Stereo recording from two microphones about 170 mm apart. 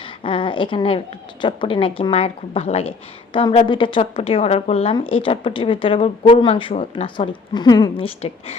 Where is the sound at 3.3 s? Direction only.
30° left (ahead or behind).